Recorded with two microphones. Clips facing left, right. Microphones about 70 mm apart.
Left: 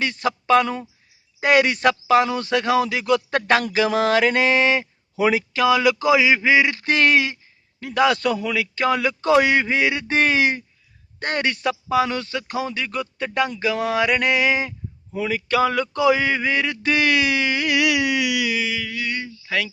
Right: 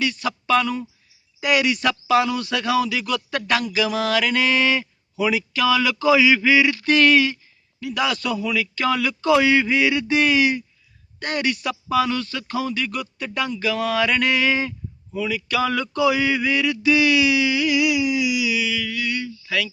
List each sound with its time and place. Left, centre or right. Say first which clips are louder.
0.0 s mantra: left 1 dB; left
5.1 s a man's voice: left 2 dB; left
7.8 s mantra: left 5 dB; left
11.2 s a man's voice: left 1 dB; left
15.1 s mantra: left 2 dB; left
18.9 s a sound: right 1 dB; left